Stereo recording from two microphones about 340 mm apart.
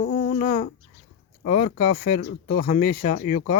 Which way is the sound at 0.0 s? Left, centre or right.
Left.